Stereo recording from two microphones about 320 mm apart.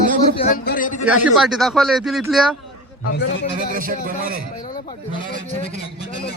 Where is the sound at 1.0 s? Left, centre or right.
Centre.